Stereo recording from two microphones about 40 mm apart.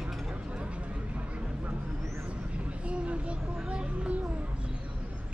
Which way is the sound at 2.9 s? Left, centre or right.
Right.